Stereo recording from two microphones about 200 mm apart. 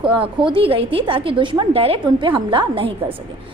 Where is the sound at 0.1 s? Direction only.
25° right (ahead or behind).